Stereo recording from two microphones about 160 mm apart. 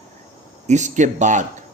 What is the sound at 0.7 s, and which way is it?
Speech, 50° right (ahead or behind).